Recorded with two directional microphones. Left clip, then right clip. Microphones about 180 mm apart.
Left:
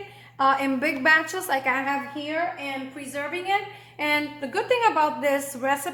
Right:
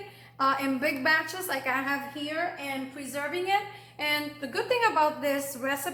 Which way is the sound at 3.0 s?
30° left (ahead or behind).